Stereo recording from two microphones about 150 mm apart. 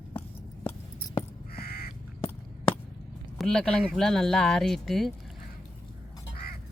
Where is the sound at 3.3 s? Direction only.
5° left (ahead or behind).